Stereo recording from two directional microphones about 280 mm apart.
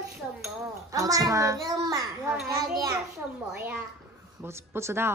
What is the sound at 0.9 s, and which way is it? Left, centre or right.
A child's voice, centre.